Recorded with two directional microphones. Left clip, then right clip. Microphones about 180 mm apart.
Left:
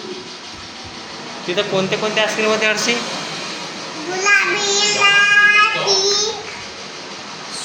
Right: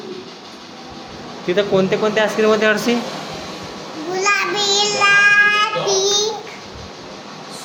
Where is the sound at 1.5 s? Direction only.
65° right (ahead or behind).